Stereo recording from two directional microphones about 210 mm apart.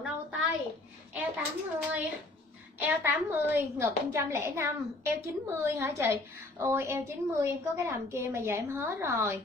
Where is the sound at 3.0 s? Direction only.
10° right (ahead or behind).